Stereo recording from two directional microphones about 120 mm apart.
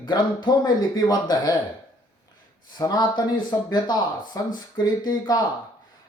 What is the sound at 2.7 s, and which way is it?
Speech, 35° left (ahead or behind).